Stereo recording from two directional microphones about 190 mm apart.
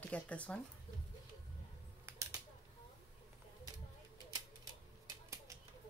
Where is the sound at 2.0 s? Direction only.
15° right (ahead or behind).